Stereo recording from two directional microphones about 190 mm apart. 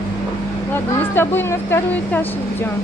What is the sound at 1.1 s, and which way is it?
Speech, 10° left (ahead or behind).